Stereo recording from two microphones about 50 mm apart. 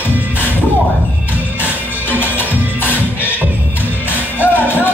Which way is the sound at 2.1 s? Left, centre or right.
Left.